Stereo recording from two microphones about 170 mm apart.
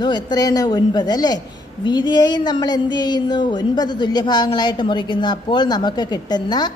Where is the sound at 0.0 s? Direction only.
25° left (ahead or behind).